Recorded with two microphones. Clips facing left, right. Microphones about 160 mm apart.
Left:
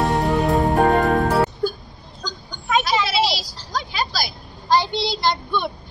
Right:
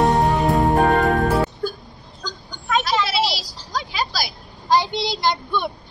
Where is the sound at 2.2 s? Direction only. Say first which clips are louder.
Left 1 dB; centre (ahead or behind).